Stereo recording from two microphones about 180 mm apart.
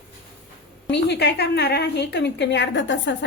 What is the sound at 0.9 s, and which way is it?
A woman's voice, 70° left (ahead or behind).